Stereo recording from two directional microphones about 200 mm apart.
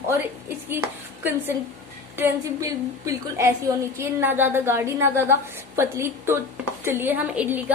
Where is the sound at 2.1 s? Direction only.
15° right (ahead or behind).